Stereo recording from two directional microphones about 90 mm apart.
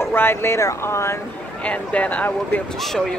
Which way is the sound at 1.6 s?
15° left (ahead or behind).